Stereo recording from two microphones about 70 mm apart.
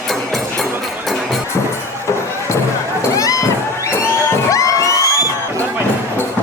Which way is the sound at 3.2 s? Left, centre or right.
Left.